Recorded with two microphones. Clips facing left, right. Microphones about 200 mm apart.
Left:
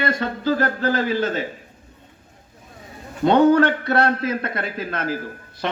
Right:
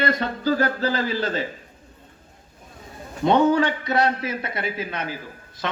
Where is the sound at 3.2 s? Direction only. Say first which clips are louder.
Left 3 dB; 55° left (ahead or behind).